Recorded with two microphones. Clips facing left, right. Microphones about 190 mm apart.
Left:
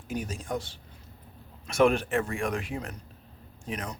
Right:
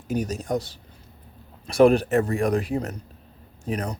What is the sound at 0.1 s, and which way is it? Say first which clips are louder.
Speech: right 7 dB; 40° right (ahead or behind).